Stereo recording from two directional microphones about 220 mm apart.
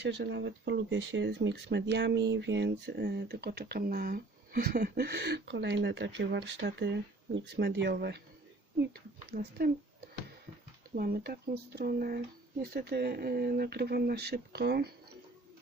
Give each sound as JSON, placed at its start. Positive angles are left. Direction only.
{"t": 0.1, "sound": "speech", "side_deg": -55}
{"t": 9.3, "sound": "speech", "side_deg": -45}
{"t": 10.9, "sound": "speech", "side_deg": -45}